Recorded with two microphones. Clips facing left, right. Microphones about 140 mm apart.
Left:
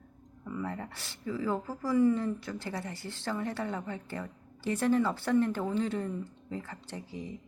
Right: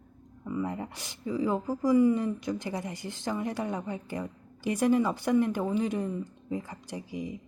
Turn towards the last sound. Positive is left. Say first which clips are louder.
# right 4 dB
turn(degrees=-15)  # may be behind; listen again after turning